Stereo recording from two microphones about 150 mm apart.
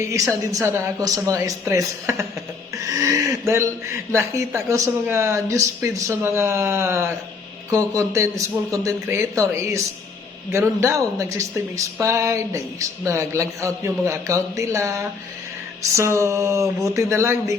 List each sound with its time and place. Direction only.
0.1 s speech: 20° right (ahead or behind)